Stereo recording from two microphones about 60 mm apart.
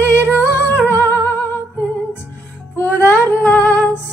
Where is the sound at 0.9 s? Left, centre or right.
Right.